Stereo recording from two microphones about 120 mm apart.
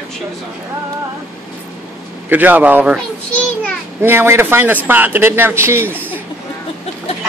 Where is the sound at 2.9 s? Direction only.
10° left (ahead or behind).